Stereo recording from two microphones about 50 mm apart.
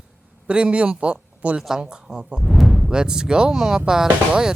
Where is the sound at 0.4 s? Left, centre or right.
Right.